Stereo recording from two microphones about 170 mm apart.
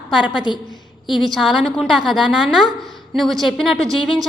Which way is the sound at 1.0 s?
Centre (ahead or behind).